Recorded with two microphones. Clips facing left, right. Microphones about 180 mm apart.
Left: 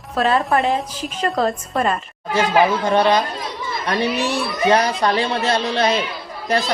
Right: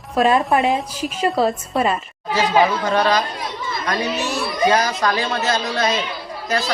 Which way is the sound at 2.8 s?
25° left (ahead or behind).